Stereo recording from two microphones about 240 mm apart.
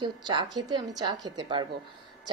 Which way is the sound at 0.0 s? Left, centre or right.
Centre.